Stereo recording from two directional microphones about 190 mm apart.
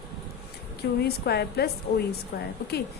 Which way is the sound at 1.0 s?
55° left (ahead or behind).